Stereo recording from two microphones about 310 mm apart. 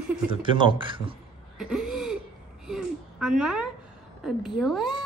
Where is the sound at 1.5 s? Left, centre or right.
Centre.